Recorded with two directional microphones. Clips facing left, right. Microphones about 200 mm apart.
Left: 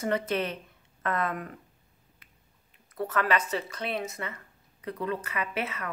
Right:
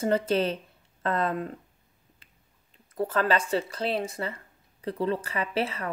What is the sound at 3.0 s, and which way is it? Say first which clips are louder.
Speech: right 2 dB; 30° right (ahead or behind).